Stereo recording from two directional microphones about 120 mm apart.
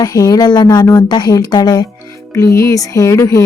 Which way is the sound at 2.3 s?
25° left (ahead or behind).